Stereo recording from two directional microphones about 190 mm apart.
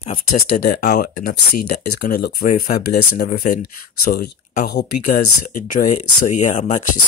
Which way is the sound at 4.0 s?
55° left (ahead or behind).